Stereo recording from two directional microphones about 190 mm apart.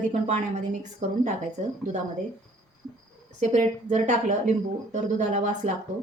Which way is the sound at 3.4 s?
40° right (ahead or behind).